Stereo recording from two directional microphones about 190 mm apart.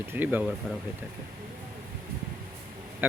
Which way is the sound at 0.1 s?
10° right (ahead or behind).